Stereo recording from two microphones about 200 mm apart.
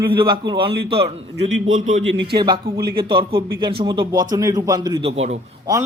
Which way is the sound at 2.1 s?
65° right (ahead or behind).